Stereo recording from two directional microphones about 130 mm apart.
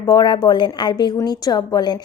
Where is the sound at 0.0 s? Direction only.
30° left (ahead or behind).